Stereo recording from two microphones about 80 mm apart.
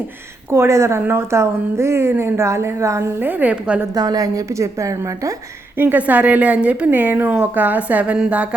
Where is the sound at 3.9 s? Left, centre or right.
Right.